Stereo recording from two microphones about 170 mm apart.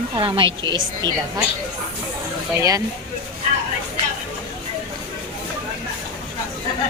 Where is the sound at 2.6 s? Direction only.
20° right (ahead or behind).